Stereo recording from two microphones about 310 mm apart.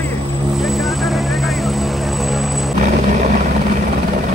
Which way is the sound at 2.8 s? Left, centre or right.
Right.